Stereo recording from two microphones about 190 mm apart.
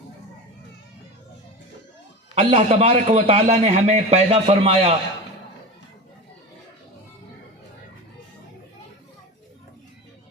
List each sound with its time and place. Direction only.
2.3 s a man's voice: 35° right (ahead or behind)